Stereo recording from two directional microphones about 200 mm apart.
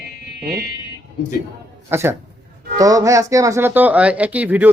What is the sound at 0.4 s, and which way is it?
Speech, 50° right (ahead or behind).